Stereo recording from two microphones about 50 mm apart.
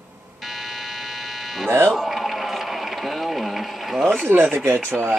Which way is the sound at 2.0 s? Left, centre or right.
Centre.